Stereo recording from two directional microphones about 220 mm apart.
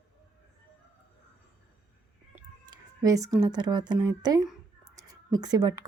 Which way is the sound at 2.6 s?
15° right (ahead or behind).